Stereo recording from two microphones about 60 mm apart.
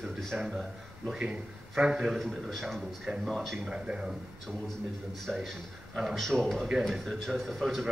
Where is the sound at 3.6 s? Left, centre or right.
Centre.